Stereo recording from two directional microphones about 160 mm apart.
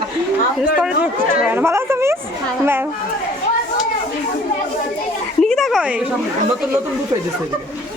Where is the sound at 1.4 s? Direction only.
10° right (ahead or behind).